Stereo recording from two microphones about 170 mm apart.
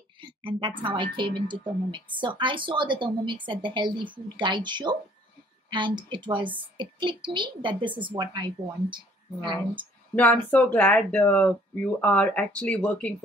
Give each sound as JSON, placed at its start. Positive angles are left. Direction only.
{"t": 0.2, "sound": "a woman's voice", "side_deg": -30}
{"t": 10.1, "sound": "speech", "side_deg": 10}